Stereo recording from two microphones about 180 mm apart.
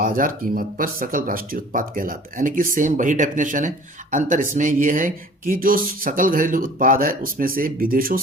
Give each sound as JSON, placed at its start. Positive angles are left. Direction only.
{"t": 0.0, "sound": "speech", "side_deg": -50}